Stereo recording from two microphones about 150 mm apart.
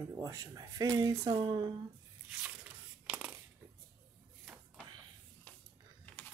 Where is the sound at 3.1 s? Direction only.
5° right (ahead or behind).